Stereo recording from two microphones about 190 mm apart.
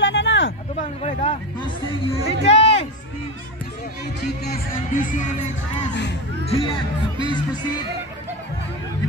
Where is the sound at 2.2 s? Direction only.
35° left (ahead or behind).